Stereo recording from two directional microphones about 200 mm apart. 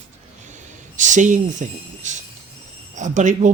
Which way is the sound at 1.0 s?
40° right (ahead or behind).